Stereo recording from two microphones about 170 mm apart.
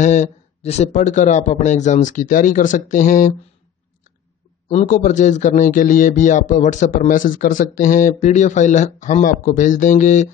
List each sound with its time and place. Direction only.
0.0 s a man's voice: 45° left (ahead or behind)
4.6 s a man's voice: 45° left (ahead or behind)